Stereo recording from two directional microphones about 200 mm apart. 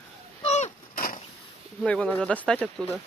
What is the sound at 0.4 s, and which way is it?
Vehicle, 35° left (ahead or behind).